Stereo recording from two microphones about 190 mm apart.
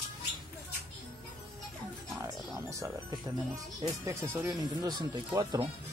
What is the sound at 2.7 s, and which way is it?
Music, 15° right (ahead or behind).